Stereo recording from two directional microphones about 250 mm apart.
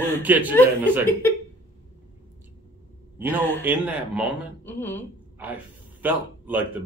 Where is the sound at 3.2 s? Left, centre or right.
Centre.